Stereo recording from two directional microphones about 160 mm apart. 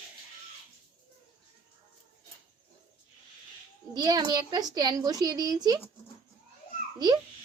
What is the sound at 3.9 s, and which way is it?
A child's voice, 25° right (ahead or behind).